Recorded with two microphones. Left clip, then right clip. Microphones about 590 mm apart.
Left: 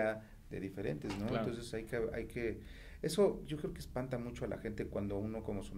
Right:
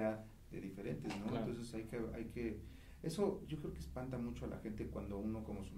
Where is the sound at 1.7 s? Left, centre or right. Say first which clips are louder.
Left 7 dB; left.